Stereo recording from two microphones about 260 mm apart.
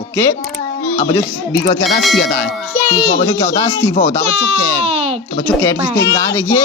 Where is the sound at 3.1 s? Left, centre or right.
Centre.